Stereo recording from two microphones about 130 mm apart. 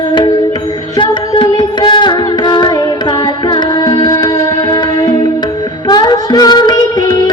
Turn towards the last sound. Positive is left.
turn(degrees=35)  # may be behind; listen again after turning